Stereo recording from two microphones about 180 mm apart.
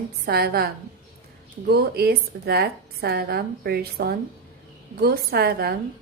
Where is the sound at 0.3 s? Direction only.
60° right (ahead or behind).